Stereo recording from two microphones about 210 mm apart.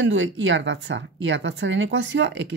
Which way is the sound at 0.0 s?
65° right (ahead or behind).